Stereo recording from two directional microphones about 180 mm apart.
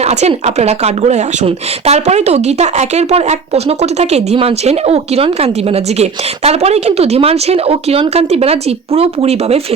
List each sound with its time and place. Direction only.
0.0 s speech: 35° right (ahead or behind)